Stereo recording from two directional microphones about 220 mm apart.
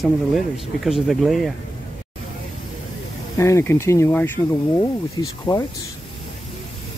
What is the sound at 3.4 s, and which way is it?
Speech, 10° left (ahead or behind).